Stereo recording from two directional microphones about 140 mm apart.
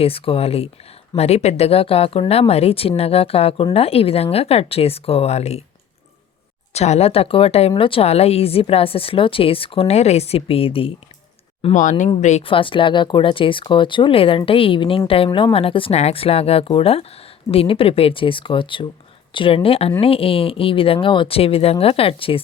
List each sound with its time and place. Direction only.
0.0 s speech: 40° left (ahead or behind)
6.7 s speech: 50° left (ahead or behind)
11.7 s speech: 65° left (ahead or behind)
12.4 s speech: 40° left (ahead or behind)